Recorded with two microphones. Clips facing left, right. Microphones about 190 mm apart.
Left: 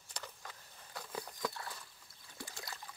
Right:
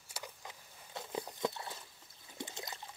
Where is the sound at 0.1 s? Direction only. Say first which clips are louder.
Right 1 dB; 15° right (ahead or behind).